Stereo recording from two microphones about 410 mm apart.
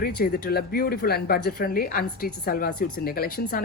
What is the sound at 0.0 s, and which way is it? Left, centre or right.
Speech, left.